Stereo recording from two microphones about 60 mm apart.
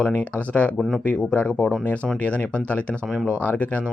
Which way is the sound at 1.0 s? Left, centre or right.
Left.